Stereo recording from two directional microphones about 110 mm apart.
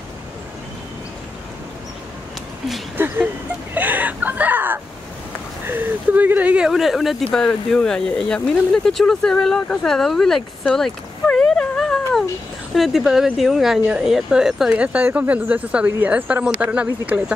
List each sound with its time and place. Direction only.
3.0 s speech: 20° right (ahead or behind)